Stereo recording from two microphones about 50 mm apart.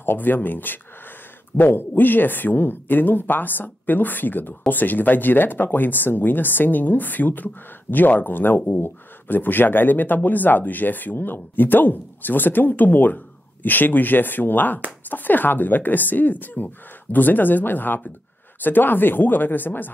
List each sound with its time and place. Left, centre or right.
0.0 s speech: left